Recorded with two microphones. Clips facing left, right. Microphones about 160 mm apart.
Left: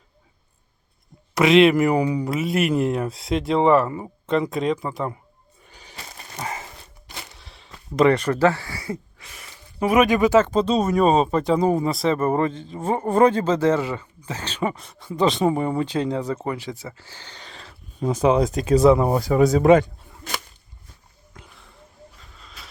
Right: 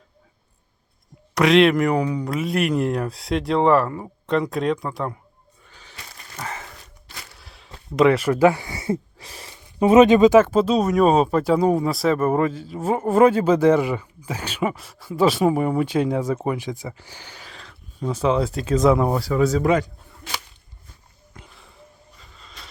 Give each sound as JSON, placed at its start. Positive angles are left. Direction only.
{"t": 1.4, "sound": "speech", "side_deg": 0}
{"t": 5.6, "sound": "a sound", "side_deg": 15}
{"t": 7.3, "sound": "speech", "side_deg": 0}
{"t": 9.1, "sound": "a sound", "side_deg": -35}
{"t": 9.5, "sound": "speech", "side_deg": -20}
{"t": 18.0, "sound": "speech", "side_deg": 15}
{"t": 18.9, "sound": "speech", "side_deg": 0}
{"t": 19.1, "sound": "speech", "side_deg": 20}
{"t": 21.3, "sound": "a sound", "side_deg": 0}